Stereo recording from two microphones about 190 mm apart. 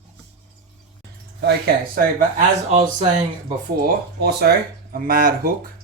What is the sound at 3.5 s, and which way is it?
Speech, 50° right (ahead or behind).